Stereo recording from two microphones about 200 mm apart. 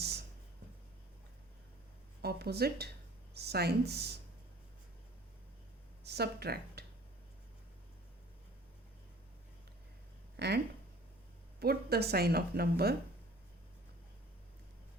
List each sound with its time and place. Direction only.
0.0 s a sound: 55° right (ahead or behind)
2.2 s speech: 55° right (ahead or behind)
6.1 s speech: 55° right (ahead or behind)
10.3 s speech: 55° right (ahead or behind)
11.6 s speech: 50° right (ahead or behind)